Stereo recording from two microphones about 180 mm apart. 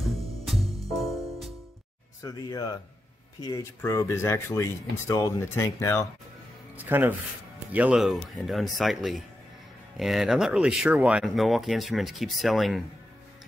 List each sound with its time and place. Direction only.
0.5 s music: centre (ahead or behind)
2.2 s speech: 20° left (ahead or behind)
6.8 s speech: 10° right (ahead or behind)